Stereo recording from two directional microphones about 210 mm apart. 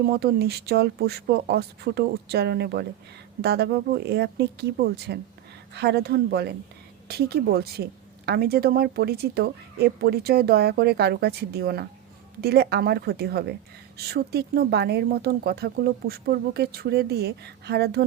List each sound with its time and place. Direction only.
0.0 s speech: 50° right (ahead or behind)